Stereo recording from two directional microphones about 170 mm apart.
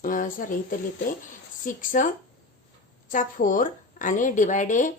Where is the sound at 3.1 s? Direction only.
50° left (ahead or behind).